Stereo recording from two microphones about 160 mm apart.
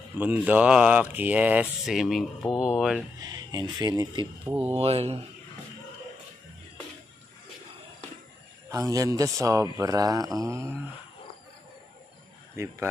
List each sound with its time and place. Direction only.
0.2 s speech: 10° right (ahead or behind)
3.2 s speech: 25° right (ahead or behind)
4.5 s speech: 10° right (ahead or behind)
4.7 s mantra: 40° right (ahead or behind)
8.6 s speech: 20° right (ahead or behind)
12.6 s speech: 15° right (ahead or behind)